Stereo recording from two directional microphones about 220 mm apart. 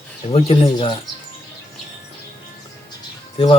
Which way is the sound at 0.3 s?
25° left (ahead or behind).